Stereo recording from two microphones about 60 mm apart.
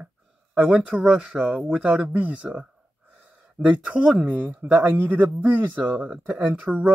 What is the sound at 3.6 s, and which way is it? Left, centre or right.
Speech, centre.